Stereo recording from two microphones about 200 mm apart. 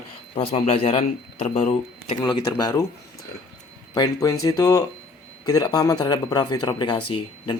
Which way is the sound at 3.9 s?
15° left (ahead or behind).